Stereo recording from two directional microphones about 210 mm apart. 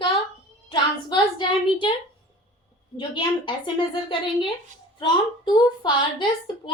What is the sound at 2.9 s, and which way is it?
A woman's voice, 20° left (ahead or behind).